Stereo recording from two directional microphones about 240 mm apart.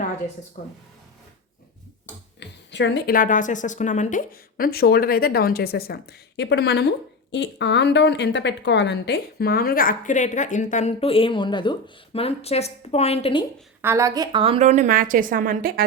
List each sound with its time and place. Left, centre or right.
0.6 s speech: left
2.4 s speech: left
13.8 s a woman's voice: centre; by 15.8 s right